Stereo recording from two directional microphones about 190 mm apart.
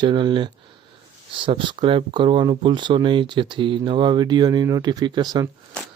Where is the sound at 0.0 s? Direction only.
25° right (ahead or behind).